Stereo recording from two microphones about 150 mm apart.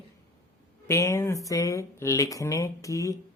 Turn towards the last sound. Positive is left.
turn(degrees=20)  # may be behind; listen again after turning